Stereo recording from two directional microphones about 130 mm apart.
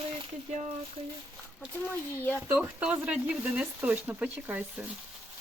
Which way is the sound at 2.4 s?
10° right (ahead or behind).